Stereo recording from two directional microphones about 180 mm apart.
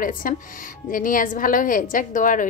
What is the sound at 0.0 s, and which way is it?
Speech, 50° left (ahead or behind).